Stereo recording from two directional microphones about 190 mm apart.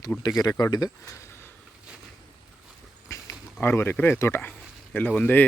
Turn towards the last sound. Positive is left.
turn(degrees=5)  # may be behind; listen again after turning